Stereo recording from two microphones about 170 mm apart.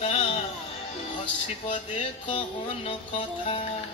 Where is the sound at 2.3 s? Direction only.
30° left (ahead or behind).